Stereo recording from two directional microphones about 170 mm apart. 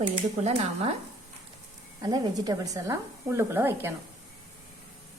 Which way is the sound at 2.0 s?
20° right (ahead or behind).